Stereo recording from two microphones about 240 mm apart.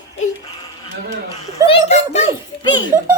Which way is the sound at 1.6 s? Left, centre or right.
Left.